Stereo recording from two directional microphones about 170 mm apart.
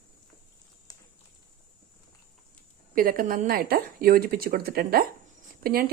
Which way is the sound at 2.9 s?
55° right (ahead or behind).